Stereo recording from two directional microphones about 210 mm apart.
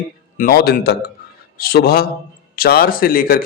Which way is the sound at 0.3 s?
45° left (ahead or behind).